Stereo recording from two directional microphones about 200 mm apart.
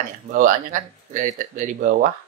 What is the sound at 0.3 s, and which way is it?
Speech, 40° right (ahead or behind).